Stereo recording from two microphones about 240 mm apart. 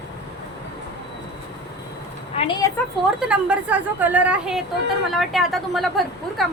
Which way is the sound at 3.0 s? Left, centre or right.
Centre.